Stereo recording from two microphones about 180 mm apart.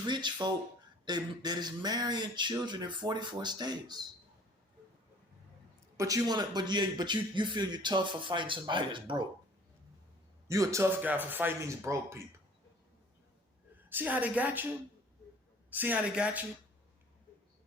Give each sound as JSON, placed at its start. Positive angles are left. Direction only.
{"t": 0.0, "sound": "a man's voice", "side_deg": -25}
{"t": 6.0, "sound": "a man's voice", "side_deg": -20}
{"t": 10.5, "sound": "speech", "side_deg": -15}
{"t": 13.9, "sound": "speech", "side_deg": -10}
{"t": 15.7, "sound": "speech", "side_deg": -10}